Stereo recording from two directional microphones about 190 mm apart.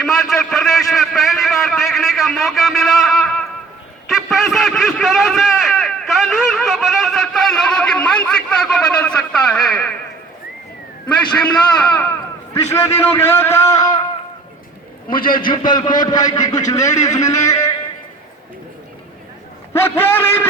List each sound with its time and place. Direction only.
0.0 s a sound: centre (ahead or behind)
4.1 s a man's voice: centre (ahead or behind)
11.3 s a man's voice: 5° left (ahead or behind)
15.1 s a man's voice: 50° left (ahead or behind)
15.4 s a man's voice: 25° left (ahead or behind)
19.7 s a man's voice: 10° left (ahead or behind)